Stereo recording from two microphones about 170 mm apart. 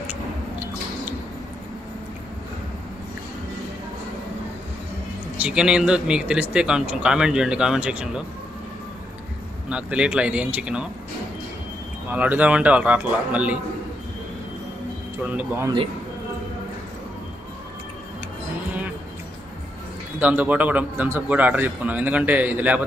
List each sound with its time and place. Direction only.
0.0 s a sound: 10° right (ahead or behind)
5.4 s a man's voice: 5° right (ahead or behind)
9.7 s a man's voice: 5° right (ahead or behind)
12.1 s a man's voice: 10° right (ahead or behind)
15.2 s a man's voice: 10° right (ahead or behind)
20.2 s a man's voice: 10° right (ahead or behind)